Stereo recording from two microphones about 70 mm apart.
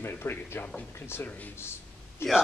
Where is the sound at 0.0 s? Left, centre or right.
Left.